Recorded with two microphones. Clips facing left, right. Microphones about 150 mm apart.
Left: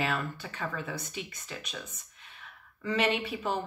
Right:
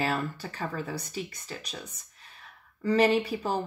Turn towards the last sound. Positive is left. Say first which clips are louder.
# right 4 dB
turn(degrees=-35)  # may be behind; listen again after turning